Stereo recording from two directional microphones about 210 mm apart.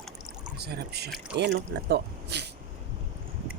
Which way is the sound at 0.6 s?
50° right (ahead or behind).